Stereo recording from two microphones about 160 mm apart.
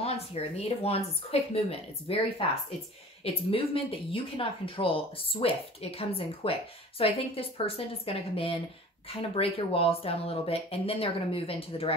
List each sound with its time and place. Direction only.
0.0 s speech: 40° left (ahead or behind)
3.4 s speech: 35° left (ahead or behind)